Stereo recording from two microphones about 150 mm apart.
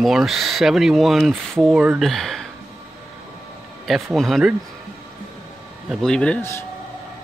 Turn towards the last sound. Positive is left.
turn(degrees=10)  # may be behind; listen again after turning